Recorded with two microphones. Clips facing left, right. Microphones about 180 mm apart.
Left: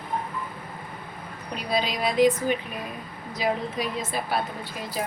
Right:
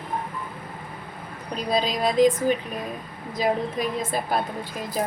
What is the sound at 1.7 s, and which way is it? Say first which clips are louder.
Speech: right 3 dB; 45° right (ahead or behind).